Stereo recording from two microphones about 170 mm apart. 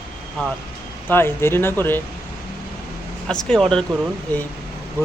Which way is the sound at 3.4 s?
5° left (ahead or behind).